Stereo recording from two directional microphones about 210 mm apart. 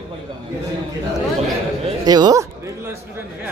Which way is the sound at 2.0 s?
20° right (ahead or behind).